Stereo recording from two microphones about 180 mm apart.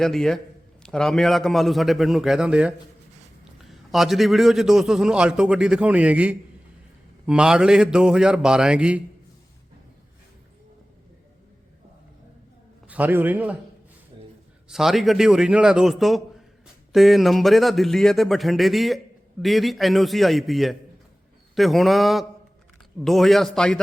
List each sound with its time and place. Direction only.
0.0 s speech: centre (ahead or behind)
12.9 s a man's voice: 10° right (ahead or behind)
14.1 s a sound: 30° right (ahead or behind)
14.7 s speech: centre (ahead or behind)